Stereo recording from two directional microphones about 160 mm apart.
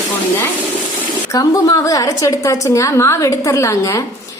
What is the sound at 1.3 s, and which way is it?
A woman's voice, 20° left (ahead or behind).